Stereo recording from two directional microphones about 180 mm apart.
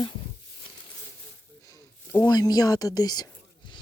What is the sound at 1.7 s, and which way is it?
A woman's voice, 15° left (ahead or behind).